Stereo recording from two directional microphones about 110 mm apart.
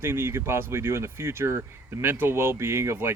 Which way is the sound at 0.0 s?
20° right (ahead or behind).